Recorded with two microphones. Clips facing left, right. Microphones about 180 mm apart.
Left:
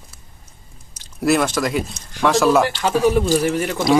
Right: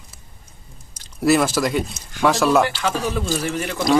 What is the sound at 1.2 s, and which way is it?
A man's voice, centre (ahead or behind).